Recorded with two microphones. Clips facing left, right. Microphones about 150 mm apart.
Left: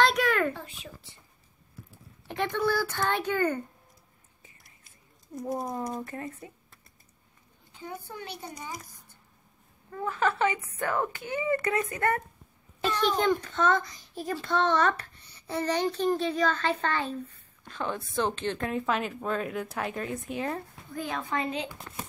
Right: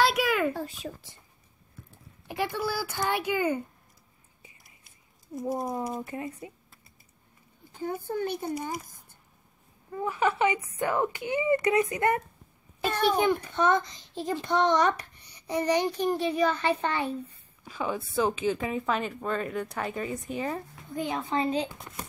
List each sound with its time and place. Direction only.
0.0 s a sound: 5° right (ahead or behind)
0.5 s speech: 40° right (ahead or behind)
2.2 s a child's voice: 5° right (ahead or behind)
4.8 s a sound: centre (ahead or behind)
5.8 s a child's voice: 10° right (ahead or behind)
7.7 s a child's voice: 45° right (ahead or behind)
9.8 s a child's voice: 15° right (ahead or behind)
20.9 s a woman's voice: 20° right (ahead or behind)